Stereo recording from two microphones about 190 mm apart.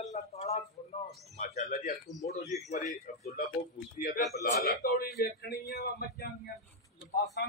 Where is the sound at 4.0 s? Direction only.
45° left (ahead or behind).